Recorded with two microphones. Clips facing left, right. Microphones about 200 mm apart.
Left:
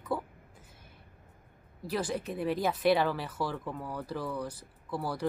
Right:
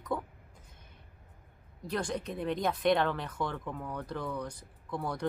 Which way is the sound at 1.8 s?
5° left (ahead or behind).